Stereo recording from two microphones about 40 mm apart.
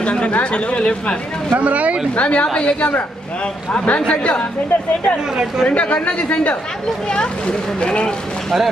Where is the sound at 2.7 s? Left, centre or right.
Left.